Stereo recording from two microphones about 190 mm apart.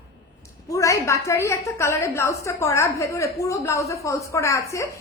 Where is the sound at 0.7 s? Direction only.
15° left (ahead or behind).